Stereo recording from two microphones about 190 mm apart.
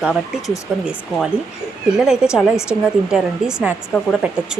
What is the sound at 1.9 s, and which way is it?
A woman's voice, 5° right (ahead or behind).